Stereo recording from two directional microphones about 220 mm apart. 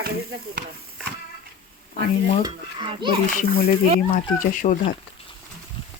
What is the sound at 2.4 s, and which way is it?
Speech, 20° right (ahead or behind).